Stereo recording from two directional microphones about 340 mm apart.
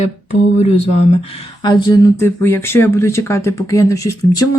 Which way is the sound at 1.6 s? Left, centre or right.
Centre.